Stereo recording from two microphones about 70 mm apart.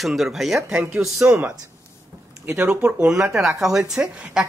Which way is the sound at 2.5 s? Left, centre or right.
Right.